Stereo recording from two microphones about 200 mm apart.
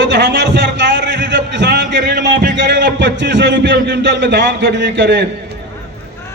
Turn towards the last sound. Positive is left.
turn(degrees=-60)  # may be behind; listen again after turning